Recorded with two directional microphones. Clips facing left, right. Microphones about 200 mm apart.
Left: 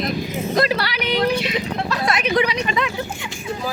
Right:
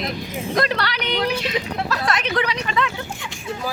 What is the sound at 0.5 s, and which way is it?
Speech, 5° left (ahead or behind).